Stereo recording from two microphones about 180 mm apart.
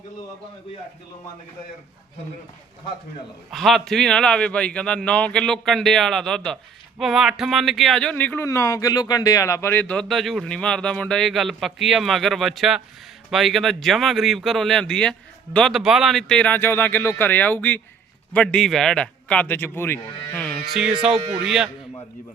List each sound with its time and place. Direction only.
3.5 s a man's voice: centre (ahead or behind)
21.1 s speech: 35° right (ahead or behind)
21.4 s speech: 5° right (ahead or behind)